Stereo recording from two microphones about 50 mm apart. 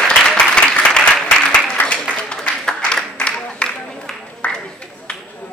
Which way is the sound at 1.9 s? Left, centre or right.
Centre.